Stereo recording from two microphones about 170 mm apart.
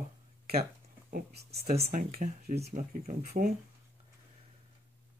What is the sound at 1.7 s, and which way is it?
Speech, 55° right (ahead or behind).